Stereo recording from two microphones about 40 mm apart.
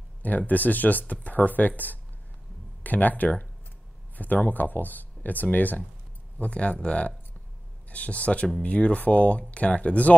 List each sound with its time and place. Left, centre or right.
0.2 s speech: left
6.3 s speech: left